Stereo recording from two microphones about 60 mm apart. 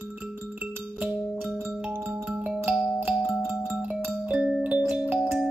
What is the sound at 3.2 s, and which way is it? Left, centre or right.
Music, centre.